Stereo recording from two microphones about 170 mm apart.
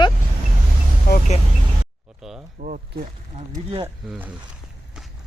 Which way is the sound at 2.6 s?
50° right (ahead or behind).